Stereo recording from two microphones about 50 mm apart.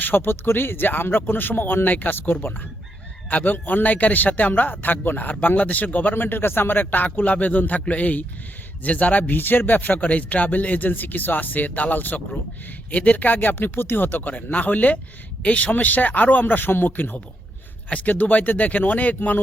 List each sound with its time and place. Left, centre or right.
0.0 s speech: left
3.2 s speech: left